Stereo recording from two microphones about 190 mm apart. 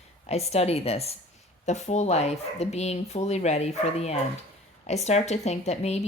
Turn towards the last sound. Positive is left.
turn(degrees=35)  # may be behind; listen again after turning